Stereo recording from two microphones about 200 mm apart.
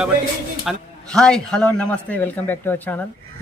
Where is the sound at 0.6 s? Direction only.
Centre (ahead or behind).